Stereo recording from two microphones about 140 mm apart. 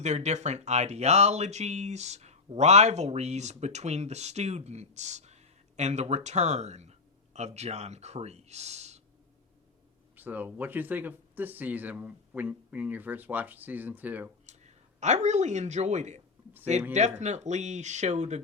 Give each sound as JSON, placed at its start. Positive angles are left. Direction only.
{"t": 0.0, "sound": "speech", "side_deg": -55}
{"t": 10.2, "sound": "speech", "side_deg": -15}
{"t": 14.4, "sound": "speech", "side_deg": -55}